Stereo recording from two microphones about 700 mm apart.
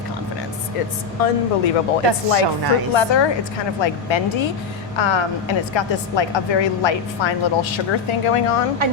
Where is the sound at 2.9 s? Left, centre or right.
Left.